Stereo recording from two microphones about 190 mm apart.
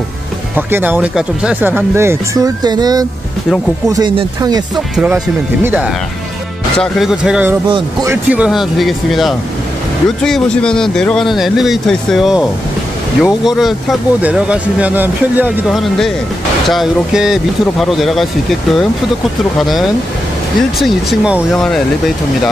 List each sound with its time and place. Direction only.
0.6 s speech: 10° right (ahead or behind)
4.7 s speech: 5° right (ahead or behind)
7.6 s speech: 25° right (ahead or behind)
8.1 s speech: 5° right (ahead or behind)